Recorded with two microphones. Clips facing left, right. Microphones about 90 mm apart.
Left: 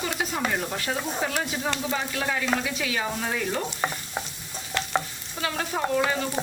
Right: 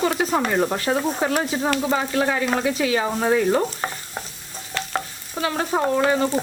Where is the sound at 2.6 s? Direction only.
40° right (ahead or behind).